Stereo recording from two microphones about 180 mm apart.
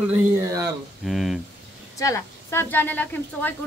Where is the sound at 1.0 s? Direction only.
Centre (ahead or behind).